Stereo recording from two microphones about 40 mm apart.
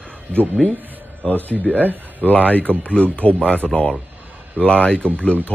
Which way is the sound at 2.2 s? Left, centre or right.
Left.